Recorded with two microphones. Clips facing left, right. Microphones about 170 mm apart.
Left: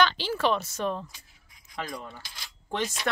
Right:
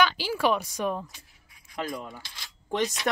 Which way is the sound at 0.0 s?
10° right (ahead or behind).